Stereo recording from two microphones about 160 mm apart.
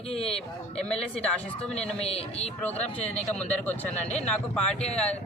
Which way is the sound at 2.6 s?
10° left (ahead or behind).